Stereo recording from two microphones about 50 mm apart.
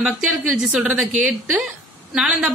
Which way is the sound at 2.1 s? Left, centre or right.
Centre.